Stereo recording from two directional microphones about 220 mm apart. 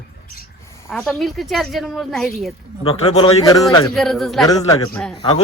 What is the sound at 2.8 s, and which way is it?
A man's voice, 25° left (ahead or behind).